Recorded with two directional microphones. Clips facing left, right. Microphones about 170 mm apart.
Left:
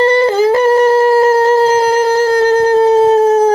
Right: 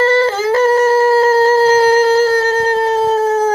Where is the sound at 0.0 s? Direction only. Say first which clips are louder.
Left 3 dB; 15° left (ahead or behind).